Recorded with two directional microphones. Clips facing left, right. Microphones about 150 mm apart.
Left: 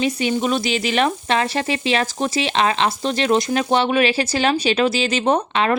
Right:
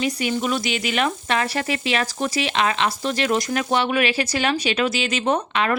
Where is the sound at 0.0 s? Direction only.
25° left (ahead or behind).